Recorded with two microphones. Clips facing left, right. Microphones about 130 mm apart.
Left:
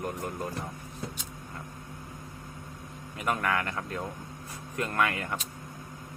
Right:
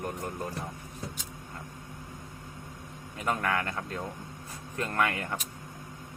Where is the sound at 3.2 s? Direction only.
30° right (ahead or behind).